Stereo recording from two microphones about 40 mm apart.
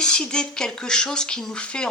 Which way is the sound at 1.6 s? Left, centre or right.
Left.